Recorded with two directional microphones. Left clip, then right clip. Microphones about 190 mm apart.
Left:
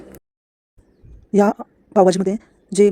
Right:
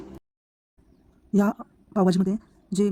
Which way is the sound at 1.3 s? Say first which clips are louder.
Left 9 dB; 20° left (ahead or behind).